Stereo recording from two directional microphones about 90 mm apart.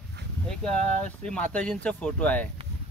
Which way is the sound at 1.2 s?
10° left (ahead or behind).